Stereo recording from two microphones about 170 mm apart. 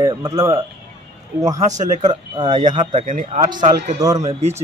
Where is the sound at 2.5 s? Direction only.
45° right (ahead or behind).